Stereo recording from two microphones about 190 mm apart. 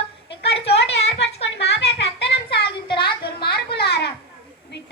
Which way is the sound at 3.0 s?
55° left (ahead or behind).